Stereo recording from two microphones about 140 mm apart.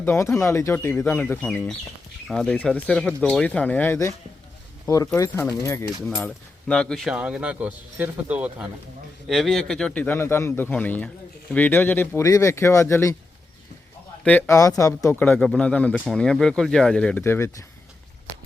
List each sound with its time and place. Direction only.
0.0 s a man's voice: 15° left (ahead or behind)
6.1 s speech: 10° left (ahead or behind)
7.1 s speech: 5° right (ahead or behind)
9.3 s a man's voice: centre (ahead or behind); by 13.1 s 20° left (ahead or behind)
14.3 s speech: 15° left (ahead or behind)
15.2 s speech: 10° left (ahead or behind)
17.2 s speech: 20° left (ahead or behind)